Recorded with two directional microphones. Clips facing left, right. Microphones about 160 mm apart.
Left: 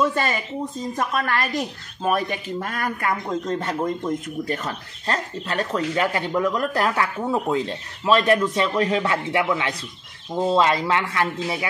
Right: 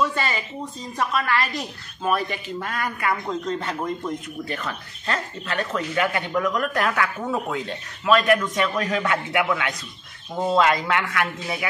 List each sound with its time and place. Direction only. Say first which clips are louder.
0.0 s speech: left 2 dB; 45° left (ahead or behind); by 11.2 s 30° left (ahead or behind)